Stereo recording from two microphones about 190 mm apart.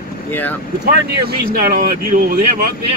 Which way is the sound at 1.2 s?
55° right (ahead or behind).